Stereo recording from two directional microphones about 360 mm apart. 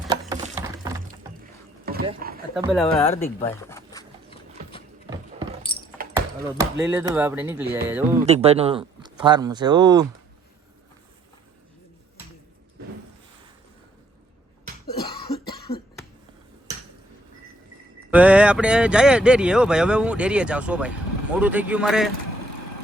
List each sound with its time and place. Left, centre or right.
0.1 s a sound: centre
1.9 s a sound: right
2.6 s speech: centre
2.8 s a sound: centre
5.7 s keys jangling: centre
6.1 s speech: centre
8.3 s speech: centre
15.7 s cough: left
18.1 s speech: centre